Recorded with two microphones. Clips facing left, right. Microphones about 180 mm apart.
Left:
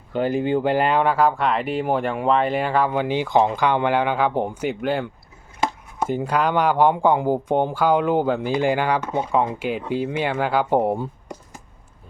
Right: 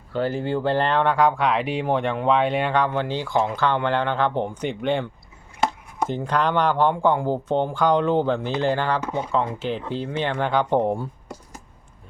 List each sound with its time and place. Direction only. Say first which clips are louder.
0.1 s speech: left 3 dB; 15° left (ahead or behind)